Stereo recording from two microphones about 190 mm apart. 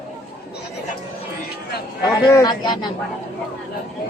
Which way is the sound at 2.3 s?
20° left (ahead or behind).